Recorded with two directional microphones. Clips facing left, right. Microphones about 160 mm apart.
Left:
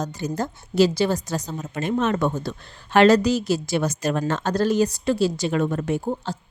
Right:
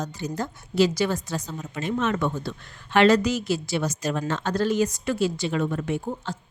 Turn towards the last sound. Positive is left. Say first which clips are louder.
# left 4 dB
turn(degrees=35)  # may be behind; listen again after turning